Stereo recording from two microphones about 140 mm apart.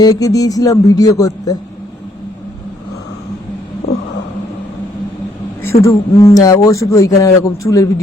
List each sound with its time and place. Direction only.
0.0 s speech: 25° left (ahead or behind)
5.8 s speech: 20° left (ahead or behind)